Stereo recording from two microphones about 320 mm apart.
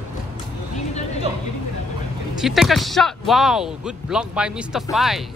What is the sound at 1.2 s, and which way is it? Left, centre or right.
Speech, centre.